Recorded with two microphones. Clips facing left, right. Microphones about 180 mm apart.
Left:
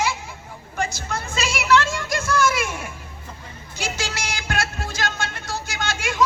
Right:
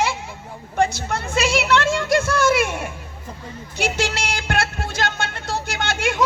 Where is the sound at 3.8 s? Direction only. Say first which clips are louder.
Right 6 dB; 60° right (ahead or behind).